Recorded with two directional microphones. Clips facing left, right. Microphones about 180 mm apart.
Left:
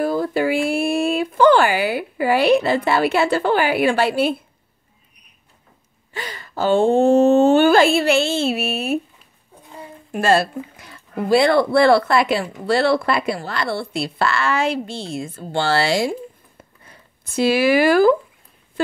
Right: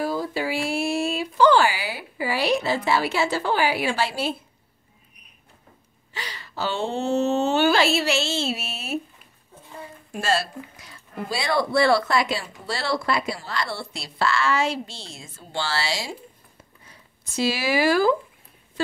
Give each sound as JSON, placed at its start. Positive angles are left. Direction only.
{"t": 0.0, "sound": "speech", "side_deg": 55}
{"t": 6.1, "sound": "a woman's voice", "side_deg": 50}
{"t": 10.1, "sound": "speech", "side_deg": 55}